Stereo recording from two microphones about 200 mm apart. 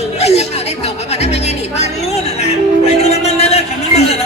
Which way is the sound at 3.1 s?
30° left (ahead or behind).